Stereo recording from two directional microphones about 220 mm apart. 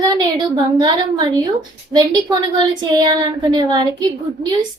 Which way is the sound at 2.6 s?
20° right (ahead or behind).